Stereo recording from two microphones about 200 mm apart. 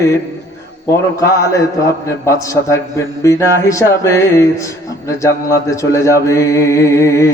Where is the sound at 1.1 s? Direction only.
15° left (ahead or behind).